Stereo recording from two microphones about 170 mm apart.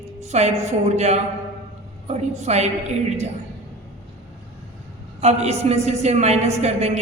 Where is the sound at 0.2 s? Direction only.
40° right (ahead or behind).